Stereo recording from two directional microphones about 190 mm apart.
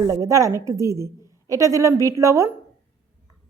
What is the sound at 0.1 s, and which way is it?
Speech, 15° right (ahead or behind).